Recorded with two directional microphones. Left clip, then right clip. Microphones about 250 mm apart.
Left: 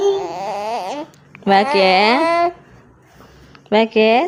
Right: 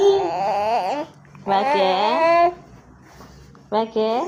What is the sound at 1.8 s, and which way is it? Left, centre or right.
Speech, left.